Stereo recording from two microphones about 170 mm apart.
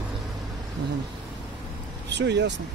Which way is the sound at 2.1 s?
90° right.